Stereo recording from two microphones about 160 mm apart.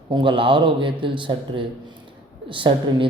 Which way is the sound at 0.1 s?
30° right (ahead or behind).